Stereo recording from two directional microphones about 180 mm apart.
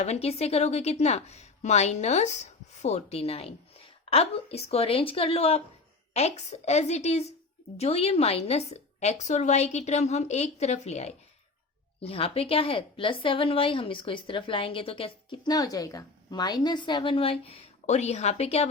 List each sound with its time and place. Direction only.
0.0 s a woman's voice: 35° left (ahead or behind)